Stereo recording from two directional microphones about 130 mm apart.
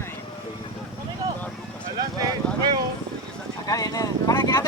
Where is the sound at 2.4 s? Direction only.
5° left (ahead or behind).